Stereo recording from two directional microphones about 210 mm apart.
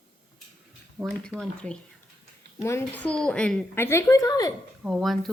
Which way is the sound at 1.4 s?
5° left (ahead or behind).